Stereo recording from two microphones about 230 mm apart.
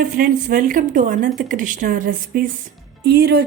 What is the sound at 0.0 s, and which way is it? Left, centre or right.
Speech, right.